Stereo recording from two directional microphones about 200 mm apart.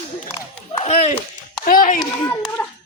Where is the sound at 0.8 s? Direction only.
35° left (ahead or behind).